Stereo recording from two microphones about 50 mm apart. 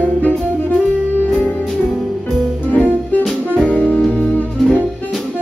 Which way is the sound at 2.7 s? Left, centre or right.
Left.